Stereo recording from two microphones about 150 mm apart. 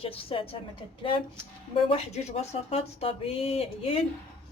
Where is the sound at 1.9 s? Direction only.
40° left (ahead or behind).